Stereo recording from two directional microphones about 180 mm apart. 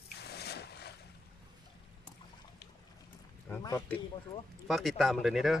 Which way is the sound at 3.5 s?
15° left (ahead or behind).